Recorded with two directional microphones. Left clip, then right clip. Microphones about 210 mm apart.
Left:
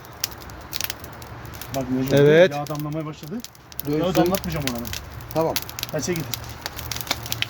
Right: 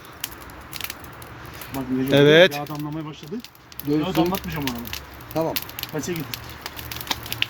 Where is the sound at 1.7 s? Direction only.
Centre (ahead or behind).